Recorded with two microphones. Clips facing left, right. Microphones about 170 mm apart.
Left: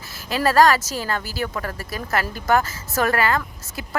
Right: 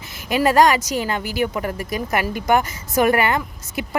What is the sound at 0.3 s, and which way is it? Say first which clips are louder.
Speech: right 1 dB; 15° right (ahead or behind).